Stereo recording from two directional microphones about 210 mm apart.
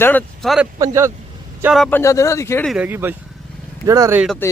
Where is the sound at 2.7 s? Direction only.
5° right (ahead or behind).